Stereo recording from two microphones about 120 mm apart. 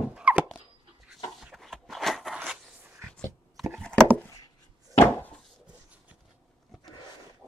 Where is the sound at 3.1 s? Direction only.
5° left (ahead or behind).